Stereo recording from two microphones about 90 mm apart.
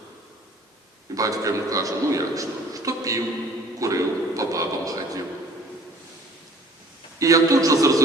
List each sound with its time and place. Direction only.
1.1 s a man's voice: 40° right (ahead or behind)
3.8 s a sound: 40° right (ahead or behind)
7.2 s speech: 40° right (ahead or behind)